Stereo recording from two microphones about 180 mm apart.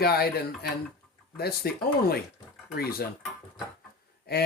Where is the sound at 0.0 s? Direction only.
60° left (ahead or behind).